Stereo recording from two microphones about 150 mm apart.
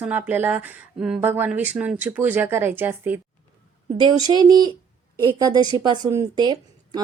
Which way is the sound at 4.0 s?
25° right (ahead or behind).